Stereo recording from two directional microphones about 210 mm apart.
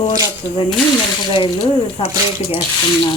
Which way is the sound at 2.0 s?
25° left (ahead or behind).